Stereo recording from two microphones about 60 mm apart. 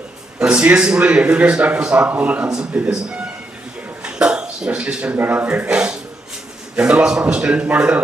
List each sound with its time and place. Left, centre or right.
0.3 s a man's voice: centre
4.0 s dishes: centre
5.1 s a man's voice: right